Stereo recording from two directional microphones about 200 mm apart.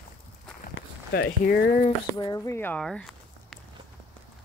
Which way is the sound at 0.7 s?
55° left (ahead or behind).